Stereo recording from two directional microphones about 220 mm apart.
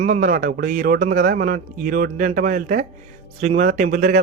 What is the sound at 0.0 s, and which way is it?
A man's voice, 35° right (ahead or behind).